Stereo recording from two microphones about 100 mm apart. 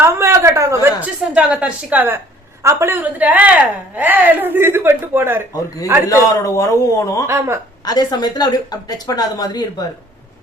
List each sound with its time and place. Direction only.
0.0 s a sound: 25° right (ahead or behind)
1.0 s a woman's voice: 10° right (ahead or behind)
6.1 s speech: 30° left (ahead or behind)
7.3 s a woman's voice: 25° right (ahead or behind)
7.9 s speech: 40° left (ahead or behind)